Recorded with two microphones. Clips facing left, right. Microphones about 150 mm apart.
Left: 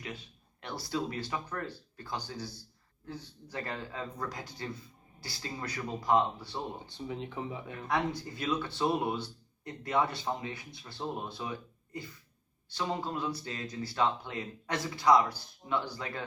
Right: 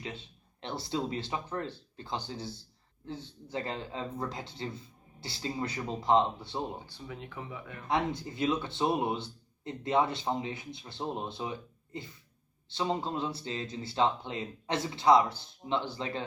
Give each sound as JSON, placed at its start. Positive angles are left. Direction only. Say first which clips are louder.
{"t": 0.6, "sound": "a man's voice", "louder": "right 1 dB", "side_deg": -25}
{"t": 6.8, "sound": "speech", "louder": "left 5 dB", "side_deg": 25}
{"t": 7.9, "sound": "a man's voice", "louder": "right 1 dB", "side_deg": -25}